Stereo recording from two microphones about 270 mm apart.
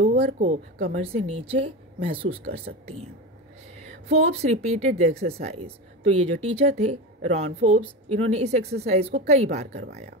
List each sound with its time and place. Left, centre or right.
0.0 s speech: right
0.5 s speech: right
2.7 s speech: right
4.1 s speech: right
9.7 s speech: right